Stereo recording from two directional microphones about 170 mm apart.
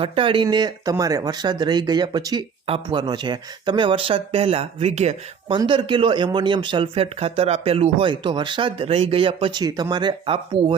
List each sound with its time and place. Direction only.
0.0 s speech: 30° right (ahead or behind)
5.5 s speech: 30° right (ahead or behind)